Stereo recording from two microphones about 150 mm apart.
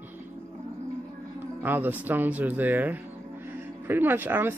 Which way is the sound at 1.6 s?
10° right (ahead or behind).